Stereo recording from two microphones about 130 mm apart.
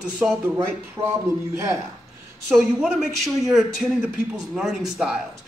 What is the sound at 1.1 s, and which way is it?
Speech, 20° right (ahead or behind).